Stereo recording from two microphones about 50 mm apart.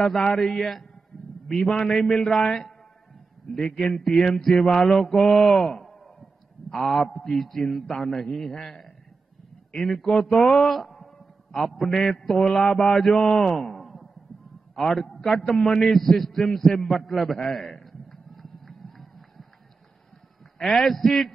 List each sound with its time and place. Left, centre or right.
0.2 s a man's voice: centre
15.9 s a man's voice: centre
17.5 s a sound: centre
20.5 s a man's voice: centre